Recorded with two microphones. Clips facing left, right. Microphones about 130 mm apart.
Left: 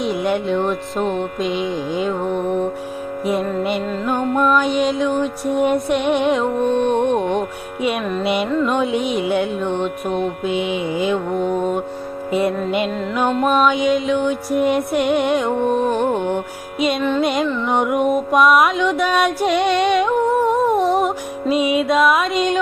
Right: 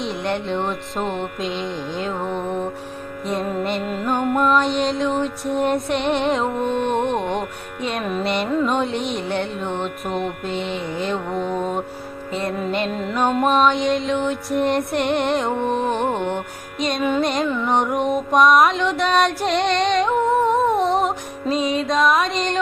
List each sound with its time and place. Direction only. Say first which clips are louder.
0.0 s music: left 5 dB; 5° left (ahead or behind)
1.0 s music: left 4 dB; 35° left (ahead or behind)
1.4 s mantra: left 5 dB; centre (ahead or behind)
3.6 s mantra: left 3 dB; 5° left (ahead or behind)
7.8 s music: left 5 dB; 10° left (ahead or behind)
8.0 s mantra: left 3 dB; centre (ahead or behind)
11.3 s music: left 4 dB; 35° left (ahead or behind)
12.3 s music: left 7 dB; 10° left (ahead or behind)
12.9 s mantra: left 1 dB; centre (ahead or behind)
17.7 s music: left 3 dB; 5° left (ahead or behind)
21.5 s music: left 4 dB; 10° left (ahead or behind)